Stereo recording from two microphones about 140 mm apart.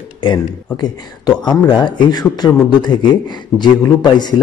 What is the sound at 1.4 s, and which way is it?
Speech, 30° left (ahead or behind).